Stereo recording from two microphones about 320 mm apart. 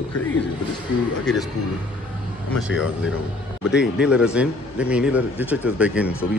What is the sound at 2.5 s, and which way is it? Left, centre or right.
Speech, centre.